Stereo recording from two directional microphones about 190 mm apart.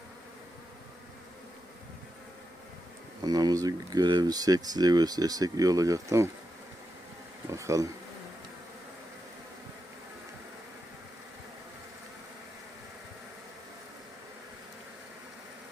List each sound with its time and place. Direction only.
3.2 s speech: 20° right (ahead or behind)
7.5 s speech: 15° right (ahead or behind)